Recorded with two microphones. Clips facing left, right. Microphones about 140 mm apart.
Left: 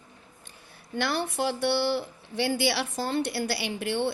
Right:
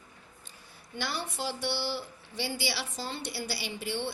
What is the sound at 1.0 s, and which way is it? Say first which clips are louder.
A woman's voice: left 7 dB; 60° left (ahead or behind).